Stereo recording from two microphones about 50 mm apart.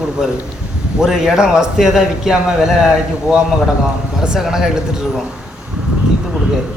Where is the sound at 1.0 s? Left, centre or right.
Centre.